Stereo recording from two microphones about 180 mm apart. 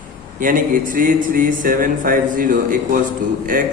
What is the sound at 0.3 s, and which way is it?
Speech, 50° right (ahead or behind).